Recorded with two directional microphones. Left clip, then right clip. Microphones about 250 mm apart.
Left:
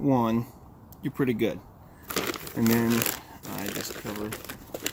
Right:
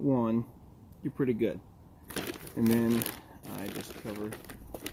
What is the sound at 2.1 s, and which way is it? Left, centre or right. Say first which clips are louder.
Crumpling: left 8 dB; centre.